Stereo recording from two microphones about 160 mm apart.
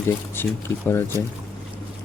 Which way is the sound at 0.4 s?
15° left (ahead or behind).